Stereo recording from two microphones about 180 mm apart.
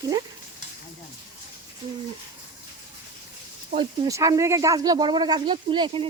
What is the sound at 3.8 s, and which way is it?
Speech, 20° right (ahead or behind).